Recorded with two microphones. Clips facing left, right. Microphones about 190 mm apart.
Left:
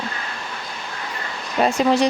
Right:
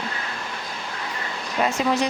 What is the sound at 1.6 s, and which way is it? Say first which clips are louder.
Speech: left 5 dB; 30° left (ahead or behind).